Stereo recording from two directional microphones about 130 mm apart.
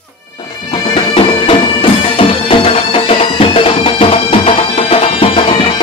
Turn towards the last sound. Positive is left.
turn(degrees=40)  # may be behind; listen again after turning